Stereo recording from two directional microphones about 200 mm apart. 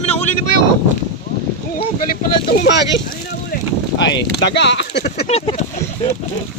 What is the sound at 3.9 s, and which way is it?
Speech, 65° left (ahead or behind).